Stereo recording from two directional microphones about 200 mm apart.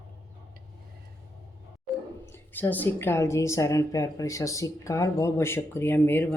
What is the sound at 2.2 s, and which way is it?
A woman's voice, 10° left (ahead or behind).